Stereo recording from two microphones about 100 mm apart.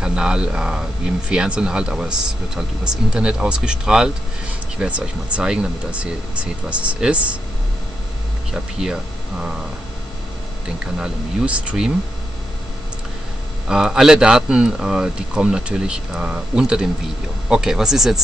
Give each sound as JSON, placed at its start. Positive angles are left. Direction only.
{"t": 0.0, "sound": "a man's voice", "side_deg": -10}
{"t": 8.7, "sound": "speech", "side_deg": -5}
{"t": 11.0, "sound": "a man's voice", "side_deg": -10}
{"t": 13.7, "sound": "a man's voice", "side_deg": -5}